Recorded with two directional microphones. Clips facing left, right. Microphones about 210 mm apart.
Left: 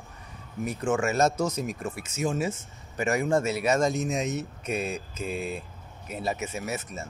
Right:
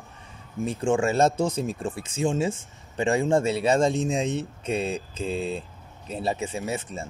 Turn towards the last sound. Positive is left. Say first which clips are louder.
# right 3 dB
turn(degrees=-30)  # may be behind; listen again after turning